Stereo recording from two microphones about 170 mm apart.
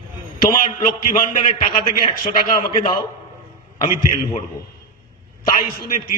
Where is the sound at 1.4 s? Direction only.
30° left (ahead or behind).